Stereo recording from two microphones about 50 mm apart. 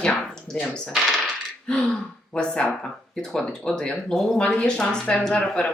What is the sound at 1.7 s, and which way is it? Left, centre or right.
Speech, centre.